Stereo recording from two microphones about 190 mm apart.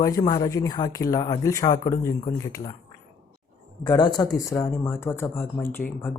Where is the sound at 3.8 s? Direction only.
20° left (ahead or behind).